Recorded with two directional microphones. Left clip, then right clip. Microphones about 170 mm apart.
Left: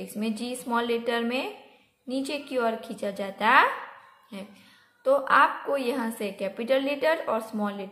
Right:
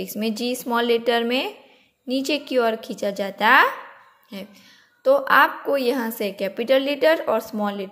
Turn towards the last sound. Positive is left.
turn(degrees=-35)  # may be behind; listen again after turning